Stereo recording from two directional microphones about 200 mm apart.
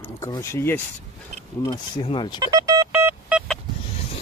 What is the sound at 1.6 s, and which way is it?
Speech, 25° left (ahead or behind).